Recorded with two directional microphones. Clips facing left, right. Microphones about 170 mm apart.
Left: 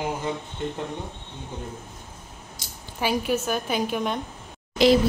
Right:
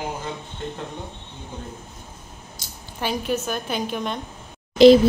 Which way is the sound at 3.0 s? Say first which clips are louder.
Left 1 dB; 5° left (ahead or behind).